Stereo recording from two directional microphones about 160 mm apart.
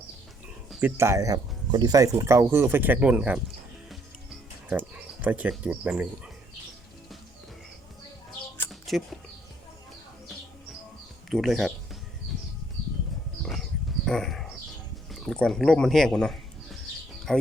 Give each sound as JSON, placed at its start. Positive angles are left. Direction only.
{"t": 0.8, "sound": "speech", "side_deg": -15}
{"t": 5.2, "sound": "speech", "side_deg": -10}
{"t": 8.7, "sound": "a sound", "side_deg": 0}
{"t": 11.3, "sound": "speech", "side_deg": 0}
{"t": 13.4, "sound": "livestock", "side_deg": 0}
{"t": 15.1, "sound": "speech", "side_deg": 0}